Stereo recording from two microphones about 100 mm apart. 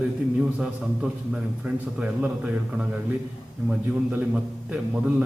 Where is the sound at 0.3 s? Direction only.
5° right (ahead or behind).